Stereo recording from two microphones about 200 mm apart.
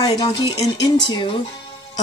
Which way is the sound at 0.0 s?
20° left (ahead or behind).